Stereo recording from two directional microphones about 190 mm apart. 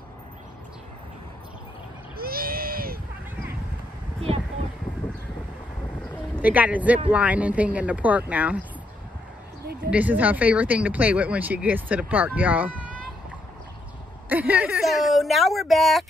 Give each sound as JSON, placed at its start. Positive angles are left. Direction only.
{"t": 2.1, "sound": "a sound", "side_deg": -50}
{"t": 6.4, "sound": "speech", "side_deg": -10}
{"t": 9.8, "sound": "speech", "side_deg": -10}
{"t": 14.3, "sound": "speech", "side_deg": -10}